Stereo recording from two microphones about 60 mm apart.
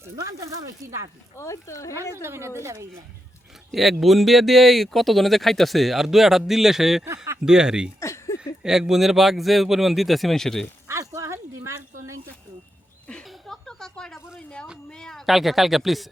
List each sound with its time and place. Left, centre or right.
0.2 s speech: right
1.4 s speech: left
2.2 s speech: right
3.7 s speech: centre
8.0 s a sound: left
8.6 s speech: centre
10.8 s a sound: right
13.5 s a sound: centre
14.8 s speech: centre
15.3 s speech: centre